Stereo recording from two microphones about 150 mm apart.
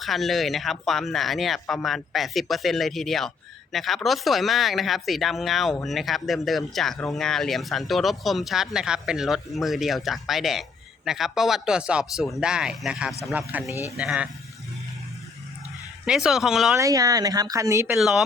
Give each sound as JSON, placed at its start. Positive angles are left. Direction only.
{"t": 0.0, "sound": "speech", "side_deg": 0}
{"t": 16.0, "sound": "speech", "side_deg": -5}
{"t": 16.7, "sound": "speech", "side_deg": -20}
{"t": 17.9, "sound": "speech", "side_deg": 0}